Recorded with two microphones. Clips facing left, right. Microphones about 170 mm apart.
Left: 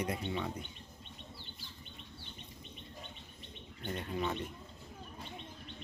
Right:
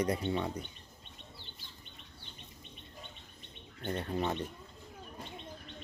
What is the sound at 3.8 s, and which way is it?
Speech, 40° right (ahead or behind).